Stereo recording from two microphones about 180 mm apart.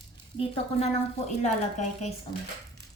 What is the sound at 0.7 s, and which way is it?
A woman's voice, 35° left (ahead or behind).